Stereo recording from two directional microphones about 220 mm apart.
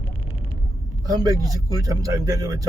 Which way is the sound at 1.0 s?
15° right (ahead or behind).